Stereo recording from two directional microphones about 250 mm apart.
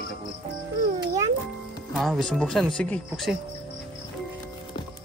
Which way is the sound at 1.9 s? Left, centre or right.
Centre.